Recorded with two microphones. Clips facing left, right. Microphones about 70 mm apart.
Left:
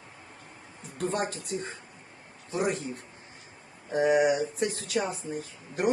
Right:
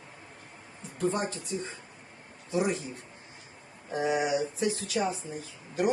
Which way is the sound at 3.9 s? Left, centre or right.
Left.